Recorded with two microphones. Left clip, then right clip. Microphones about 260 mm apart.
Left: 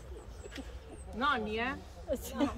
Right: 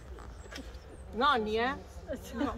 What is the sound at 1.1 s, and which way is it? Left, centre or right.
Speech, right.